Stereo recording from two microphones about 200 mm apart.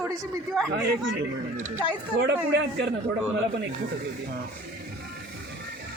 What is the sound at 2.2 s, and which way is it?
Speech, 60° right (ahead or behind).